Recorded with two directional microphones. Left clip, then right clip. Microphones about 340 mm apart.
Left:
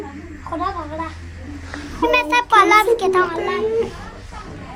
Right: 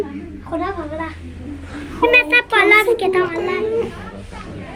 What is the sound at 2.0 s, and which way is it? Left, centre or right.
A child's voice, centre.